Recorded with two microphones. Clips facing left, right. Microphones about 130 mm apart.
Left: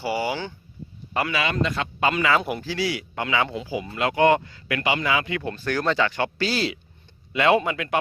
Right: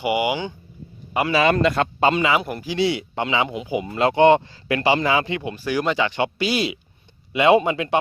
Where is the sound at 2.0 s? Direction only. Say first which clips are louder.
Right 1 dB; 25° right (ahead or behind).